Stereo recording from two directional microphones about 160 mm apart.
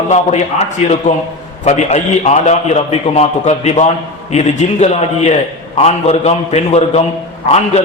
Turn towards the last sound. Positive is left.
turn(degrees=45)  # may be behind; listen again after turning